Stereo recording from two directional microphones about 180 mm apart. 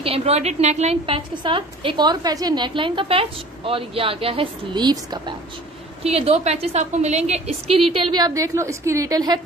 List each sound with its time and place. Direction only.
0.0 s a woman's voice: 35° right (ahead or behind)
6.0 s a woman's voice: 35° right (ahead or behind)